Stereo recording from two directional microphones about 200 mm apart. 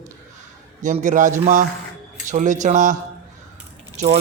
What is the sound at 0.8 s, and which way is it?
Speech, 40° right (ahead or behind).